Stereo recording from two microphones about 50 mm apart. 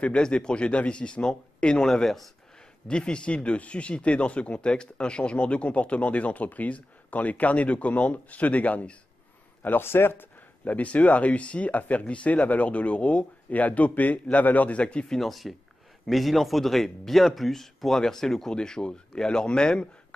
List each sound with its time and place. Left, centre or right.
0.0 s speech: left
1.9 s speech: centre
2.9 s speech: centre
9.8 s speech: left
10.6 s speech: left
15.0 s speech: centre